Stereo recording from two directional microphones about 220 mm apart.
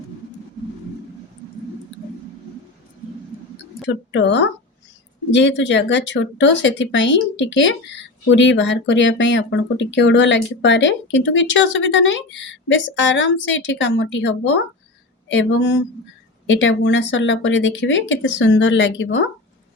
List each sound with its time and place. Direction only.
3.8 s speech: 55° left (ahead or behind)